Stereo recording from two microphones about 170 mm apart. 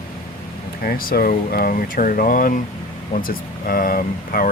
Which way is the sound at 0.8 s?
60° left (ahead or behind).